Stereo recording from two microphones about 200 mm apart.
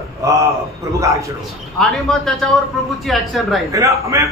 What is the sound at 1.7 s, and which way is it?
Speech, centre (ahead or behind).